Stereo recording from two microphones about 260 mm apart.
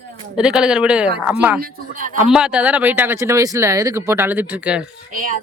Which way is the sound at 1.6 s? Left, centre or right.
Right.